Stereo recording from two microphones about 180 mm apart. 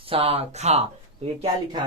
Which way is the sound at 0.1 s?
35° right (ahead or behind).